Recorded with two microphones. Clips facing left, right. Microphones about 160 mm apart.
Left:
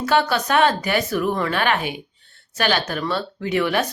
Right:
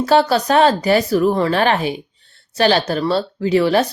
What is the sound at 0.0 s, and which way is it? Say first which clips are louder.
Speech: right 5 dB; 35° right (ahead or behind).